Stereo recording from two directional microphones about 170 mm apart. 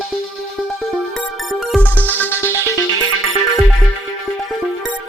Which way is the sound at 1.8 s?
10° left (ahead or behind).